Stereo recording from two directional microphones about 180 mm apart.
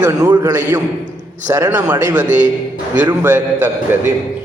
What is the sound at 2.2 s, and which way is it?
A man's voice, 10° right (ahead or behind).